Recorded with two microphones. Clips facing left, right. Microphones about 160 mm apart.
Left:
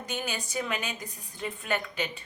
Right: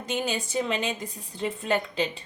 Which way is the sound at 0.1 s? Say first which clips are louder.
Right 6 dB; 25° right (ahead or behind).